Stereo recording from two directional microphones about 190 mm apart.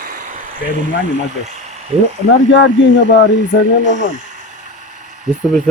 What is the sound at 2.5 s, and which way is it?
Speech, 75° left (ahead or behind).